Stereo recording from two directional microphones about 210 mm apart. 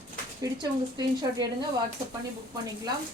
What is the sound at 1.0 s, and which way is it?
Speech, 20° right (ahead or behind).